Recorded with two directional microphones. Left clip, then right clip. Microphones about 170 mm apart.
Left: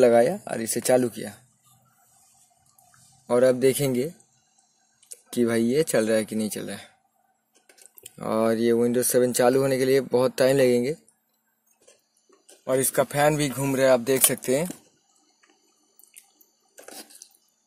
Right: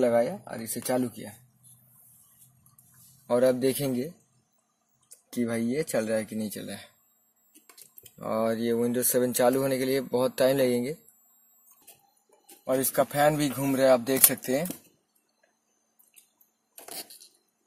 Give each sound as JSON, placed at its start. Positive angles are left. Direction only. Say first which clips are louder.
{"t": 0.0, "sound": "speech", "louder": "left 6 dB", "side_deg": 75}
{"t": 3.3, "sound": "speech", "louder": "left 4 dB", "side_deg": 30}
{"t": 5.0, "sound": "speech", "louder": "left 7 dB", "side_deg": 50}
{"t": 8.2, "sound": "speech", "louder": "left 5 dB", "side_deg": 45}
{"t": 12.6, "sound": "speech", "louder": "left 3 dB", "side_deg": 40}